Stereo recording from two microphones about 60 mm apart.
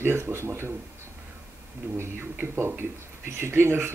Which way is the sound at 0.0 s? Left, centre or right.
Right.